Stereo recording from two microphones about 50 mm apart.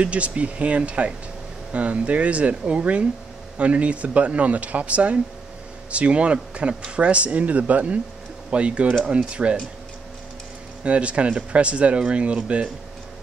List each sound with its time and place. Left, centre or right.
0.0 s speech: right
10.8 s speech: right